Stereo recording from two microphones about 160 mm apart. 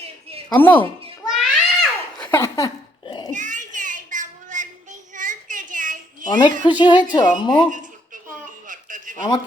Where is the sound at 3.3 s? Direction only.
50° right (ahead or behind).